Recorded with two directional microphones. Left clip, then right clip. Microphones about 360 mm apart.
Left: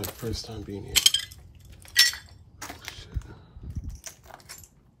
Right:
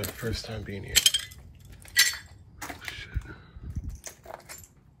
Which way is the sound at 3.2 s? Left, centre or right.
Centre.